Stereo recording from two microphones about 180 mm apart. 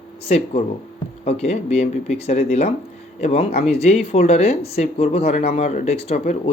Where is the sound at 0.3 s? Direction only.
35° left (ahead or behind).